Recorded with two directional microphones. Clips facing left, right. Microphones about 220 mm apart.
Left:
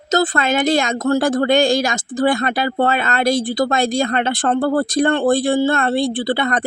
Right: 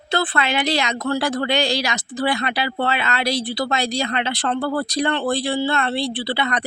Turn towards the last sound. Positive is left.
turn(degrees=45)  # may be behind; listen again after turning